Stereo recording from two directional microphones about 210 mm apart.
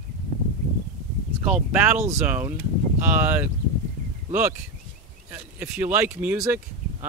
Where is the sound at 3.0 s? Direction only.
10° right (ahead or behind).